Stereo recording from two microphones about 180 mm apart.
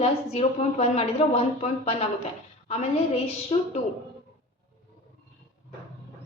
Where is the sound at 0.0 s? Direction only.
35° left (ahead or behind).